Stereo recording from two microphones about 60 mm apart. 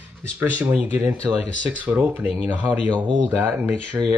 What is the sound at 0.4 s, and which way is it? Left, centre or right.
Speech, right.